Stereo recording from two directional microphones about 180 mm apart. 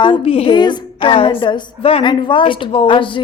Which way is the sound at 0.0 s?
30° left (ahead or behind).